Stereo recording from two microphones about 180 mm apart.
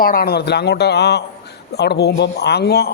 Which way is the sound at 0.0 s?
55° left (ahead or behind).